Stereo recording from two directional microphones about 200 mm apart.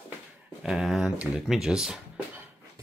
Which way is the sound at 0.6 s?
Centre (ahead or behind).